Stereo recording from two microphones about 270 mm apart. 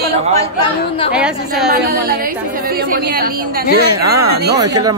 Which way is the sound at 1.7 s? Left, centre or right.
Right.